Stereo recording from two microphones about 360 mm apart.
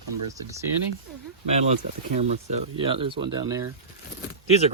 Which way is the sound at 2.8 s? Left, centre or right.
Centre.